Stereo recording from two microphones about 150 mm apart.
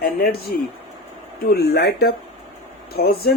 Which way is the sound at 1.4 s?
90° left.